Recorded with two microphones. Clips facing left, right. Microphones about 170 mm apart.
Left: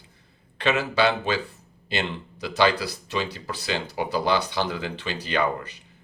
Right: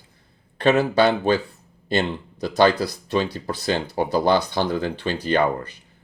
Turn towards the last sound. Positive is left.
turn(degrees=-50)  # may be behind; listen again after turning